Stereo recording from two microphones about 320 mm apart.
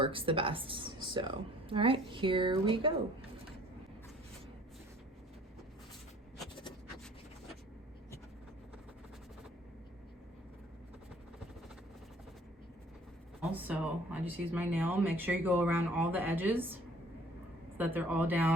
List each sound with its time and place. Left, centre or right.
0.0 s a woman's voice: centre
13.5 s speech: centre
17.7 s speech: centre